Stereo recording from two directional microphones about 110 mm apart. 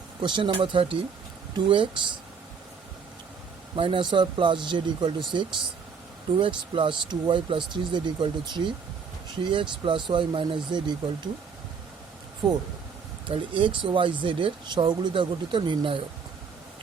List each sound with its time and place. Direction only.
0.2 s speech: 45° right (ahead or behind)
3.8 s speech: 50° right (ahead or behind)
13.2 s speech: 50° right (ahead or behind)